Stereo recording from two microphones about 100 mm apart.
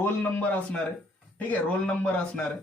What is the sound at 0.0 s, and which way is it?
A man's voice, 20° left (ahead or behind).